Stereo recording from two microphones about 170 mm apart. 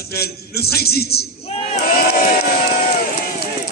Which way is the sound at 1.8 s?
65° left (ahead or behind).